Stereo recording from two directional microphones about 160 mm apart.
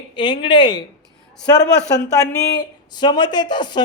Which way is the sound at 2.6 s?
25° left (ahead or behind).